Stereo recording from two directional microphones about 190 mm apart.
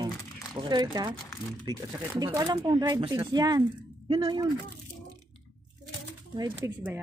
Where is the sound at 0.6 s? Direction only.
25° right (ahead or behind).